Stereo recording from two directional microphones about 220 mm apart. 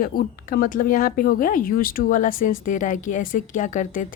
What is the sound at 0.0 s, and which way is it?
A woman's voice, 40° left (ahead or behind).